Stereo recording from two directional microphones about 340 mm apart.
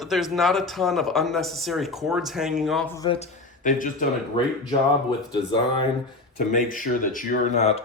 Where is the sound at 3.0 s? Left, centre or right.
Centre.